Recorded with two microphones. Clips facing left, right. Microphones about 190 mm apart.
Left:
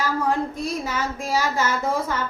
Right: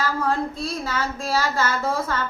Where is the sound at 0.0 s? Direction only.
15° left (ahead or behind).